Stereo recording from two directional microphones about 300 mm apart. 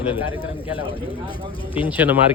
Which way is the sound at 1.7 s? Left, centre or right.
Centre.